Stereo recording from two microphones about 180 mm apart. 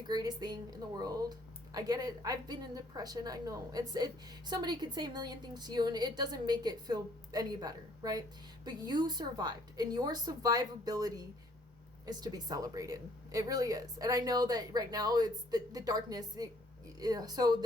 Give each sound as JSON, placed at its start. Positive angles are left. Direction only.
{"t": 0.1, "sound": "a woman's voice", "side_deg": -20}